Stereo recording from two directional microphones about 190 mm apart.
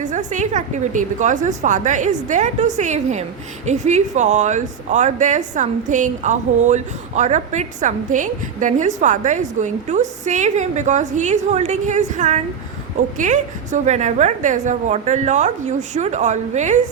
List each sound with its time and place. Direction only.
0.0 s speech: 40° right (ahead or behind)